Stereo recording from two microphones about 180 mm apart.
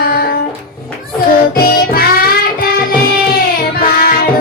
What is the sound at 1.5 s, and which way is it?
Music, 55° left (ahead or behind).